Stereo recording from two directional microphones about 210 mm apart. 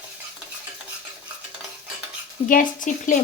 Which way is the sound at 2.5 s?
40° left (ahead or behind).